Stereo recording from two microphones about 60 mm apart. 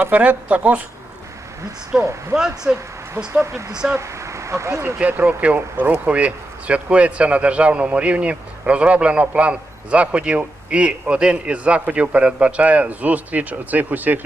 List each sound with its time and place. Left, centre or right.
0.0 s a man's voice: right
1.9 s speech: centre
3.4 s speech: right
5.2 s a man's voice: right
5.5 s speech: right
5.9 s a man's voice: right